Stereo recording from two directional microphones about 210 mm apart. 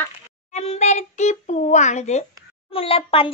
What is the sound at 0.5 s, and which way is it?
A child's voice, 30° left (ahead or behind).